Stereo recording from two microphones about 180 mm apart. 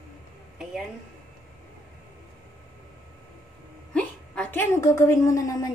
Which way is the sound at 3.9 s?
5° left (ahead or behind).